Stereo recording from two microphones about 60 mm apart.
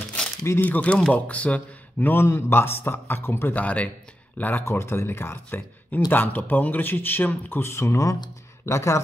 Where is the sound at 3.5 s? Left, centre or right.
Left.